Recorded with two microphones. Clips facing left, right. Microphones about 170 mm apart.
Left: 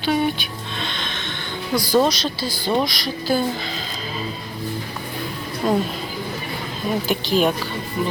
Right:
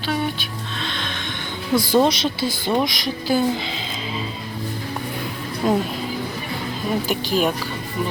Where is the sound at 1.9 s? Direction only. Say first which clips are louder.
Even; 25° right (ahead or behind).